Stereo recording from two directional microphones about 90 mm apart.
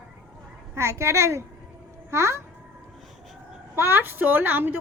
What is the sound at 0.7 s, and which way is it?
A child's voice, 35° right (ahead or behind).